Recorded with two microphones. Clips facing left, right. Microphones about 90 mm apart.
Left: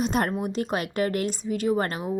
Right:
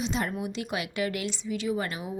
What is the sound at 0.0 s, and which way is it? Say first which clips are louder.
A woman's voice: left 5 dB; 50° left (ahead or behind).